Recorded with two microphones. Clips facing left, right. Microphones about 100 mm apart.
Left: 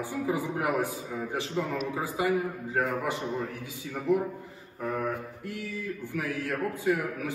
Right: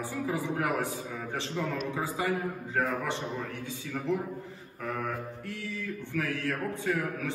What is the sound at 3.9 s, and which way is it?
A man's voice, 10° left (ahead or behind).